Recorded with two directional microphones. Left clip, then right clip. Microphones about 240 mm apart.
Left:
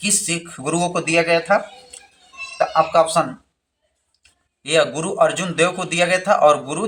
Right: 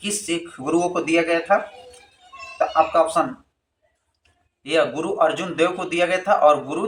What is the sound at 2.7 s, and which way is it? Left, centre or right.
Speech, left.